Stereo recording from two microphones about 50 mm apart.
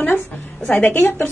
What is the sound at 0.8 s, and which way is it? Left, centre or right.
Speech, left.